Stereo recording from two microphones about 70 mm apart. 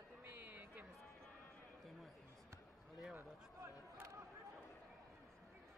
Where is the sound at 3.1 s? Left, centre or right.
Right.